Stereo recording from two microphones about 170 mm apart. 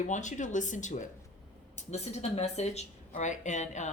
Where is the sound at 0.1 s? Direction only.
45° left (ahead or behind).